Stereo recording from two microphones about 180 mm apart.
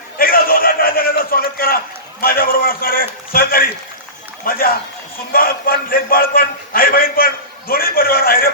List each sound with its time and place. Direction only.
0.2 s a sound: 55° left (ahead or behind)
2.2 s a man's voice: 55° left (ahead or behind)
4.4 s a man's voice: 55° left (ahead or behind)